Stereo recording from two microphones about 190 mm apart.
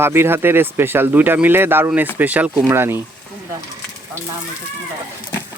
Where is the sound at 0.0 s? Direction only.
10° right (ahead or behind).